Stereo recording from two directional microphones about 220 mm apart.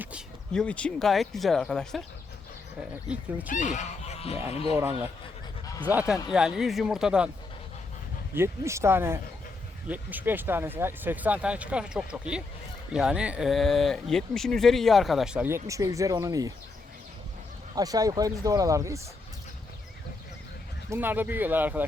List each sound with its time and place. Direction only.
0.0 s speech: centre (ahead or behind)
3.1 s speech: 5° right (ahead or behind)
3.5 s honk: 35° left (ahead or behind)
4.7 s speech: 10° right (ahead or behind)
8.4 s speech: 10° right (ahead or behind)
17.7 s speech: 15° right (ahead or behind)
20.9 s speech: 10° right (ahead or behind)